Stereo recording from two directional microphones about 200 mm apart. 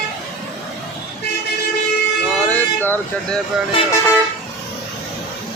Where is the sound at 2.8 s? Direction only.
10° left (ahead or behind).